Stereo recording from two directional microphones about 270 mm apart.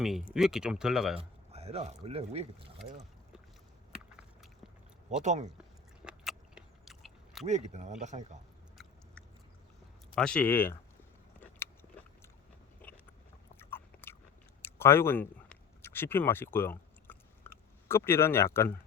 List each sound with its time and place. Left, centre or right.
0.0 s speech: centre
1.2 s speech: right
5.2 s speech: right
6.1 s biting: centre
7.4 s speech: right
10.2 s speech: centre
13.6 s biting: centre
14.6 s a sound: centre